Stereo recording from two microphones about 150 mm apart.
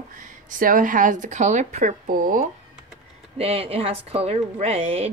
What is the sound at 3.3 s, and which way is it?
Speech, 40° right (ahead or behind).